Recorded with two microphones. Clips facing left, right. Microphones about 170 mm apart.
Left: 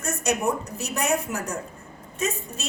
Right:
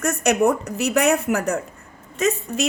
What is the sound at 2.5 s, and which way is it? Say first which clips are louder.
Speech: right 13 dB; 90° right.